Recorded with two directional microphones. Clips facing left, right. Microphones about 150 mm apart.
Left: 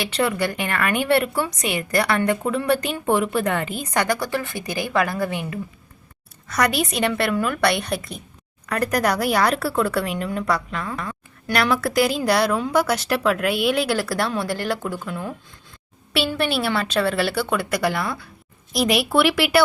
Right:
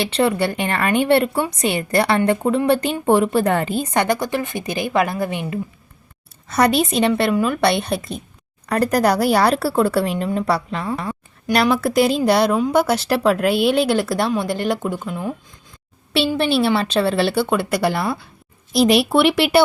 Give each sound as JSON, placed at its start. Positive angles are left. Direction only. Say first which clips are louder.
{"t": 0.0, "sound": "speech", "louder": "right 4 dB", "side_deg": -30}
{"t": 16.4, "sound": "speech", "louder": "right 6 dB", "side_deg": -25}